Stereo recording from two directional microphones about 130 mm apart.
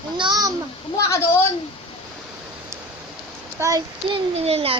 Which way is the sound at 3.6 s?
20° right (ahead or behind).